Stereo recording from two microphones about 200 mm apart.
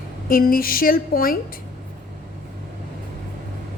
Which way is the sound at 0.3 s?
45° left (ahead or behind).